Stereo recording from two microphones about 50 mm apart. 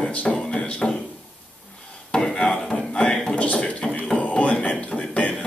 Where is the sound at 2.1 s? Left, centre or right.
Centre.